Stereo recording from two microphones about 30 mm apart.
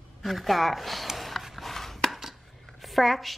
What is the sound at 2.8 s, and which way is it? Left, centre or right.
Speech, centre.